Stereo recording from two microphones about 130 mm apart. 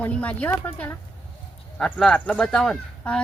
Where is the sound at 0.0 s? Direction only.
10° left (ahead or behind).